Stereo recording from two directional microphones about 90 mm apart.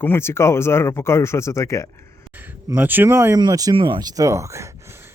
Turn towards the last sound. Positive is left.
turn(degrees=-30)  # may be behind; listen again after turning